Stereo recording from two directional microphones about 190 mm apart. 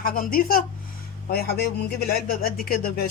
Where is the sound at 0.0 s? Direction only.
50° left (ahead or behind).